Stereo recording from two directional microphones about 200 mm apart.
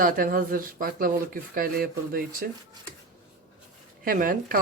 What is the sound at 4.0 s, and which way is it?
Speech, 45° right (ahead or behind).